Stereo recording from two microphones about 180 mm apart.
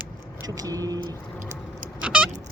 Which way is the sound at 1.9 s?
5° right (ahead or behind).